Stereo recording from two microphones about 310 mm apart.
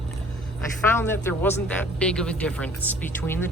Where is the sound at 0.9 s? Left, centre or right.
Centre.